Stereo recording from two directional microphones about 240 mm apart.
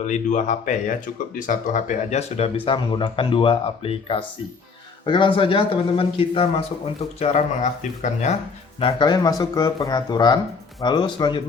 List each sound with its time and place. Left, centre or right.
0.0 s speech: left
8.8 s speech: centre